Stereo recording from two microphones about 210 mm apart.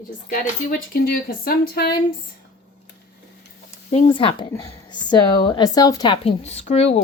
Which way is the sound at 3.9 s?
30° left (ahead or behind).